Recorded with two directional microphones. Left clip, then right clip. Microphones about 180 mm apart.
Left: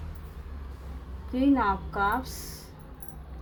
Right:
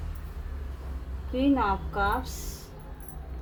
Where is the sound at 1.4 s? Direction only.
30° left (ahead or behind).